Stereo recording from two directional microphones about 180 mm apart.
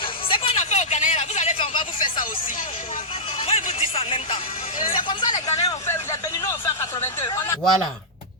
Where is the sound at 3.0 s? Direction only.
35° left (ahead or behind).